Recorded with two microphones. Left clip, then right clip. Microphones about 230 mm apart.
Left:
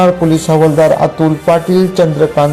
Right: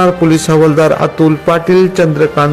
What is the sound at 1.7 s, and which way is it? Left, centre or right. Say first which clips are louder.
Speech: right 2 dB; centre.